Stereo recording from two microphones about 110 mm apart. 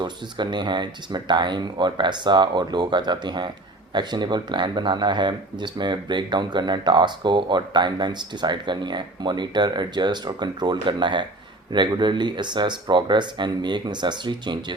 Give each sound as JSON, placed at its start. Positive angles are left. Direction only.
{"t": 0.0, "sound": "speech", "side_deg": -45}